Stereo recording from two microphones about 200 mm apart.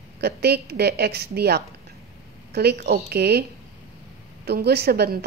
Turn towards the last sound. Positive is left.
turn(degrees=-50)  # may be behind; listen again after turning